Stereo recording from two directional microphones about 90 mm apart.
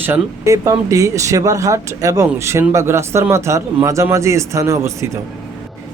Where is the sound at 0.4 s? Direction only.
35° right (ahead or behind).